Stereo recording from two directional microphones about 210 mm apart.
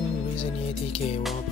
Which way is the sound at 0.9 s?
30° left (ahead or behind).